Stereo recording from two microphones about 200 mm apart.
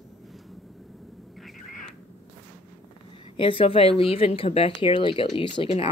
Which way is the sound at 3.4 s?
25° left (ahead or behind).